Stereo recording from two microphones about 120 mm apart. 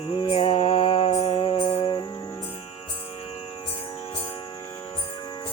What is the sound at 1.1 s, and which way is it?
Mantra, 70° left (ahead or behind).